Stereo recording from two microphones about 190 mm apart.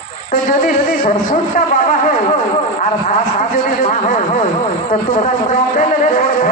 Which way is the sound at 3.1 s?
45° left (ahead or behind).